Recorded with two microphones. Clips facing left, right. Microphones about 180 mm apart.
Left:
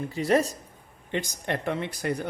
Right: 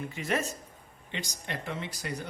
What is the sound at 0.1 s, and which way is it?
Speech, 35° left (ahead or behind).